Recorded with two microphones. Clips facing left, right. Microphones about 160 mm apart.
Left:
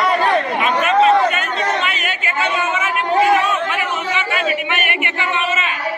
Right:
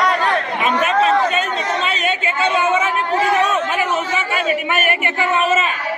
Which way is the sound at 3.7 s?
40° right (ahead or behind).